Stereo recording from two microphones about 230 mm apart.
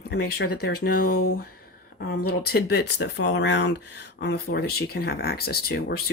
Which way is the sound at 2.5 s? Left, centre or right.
Left.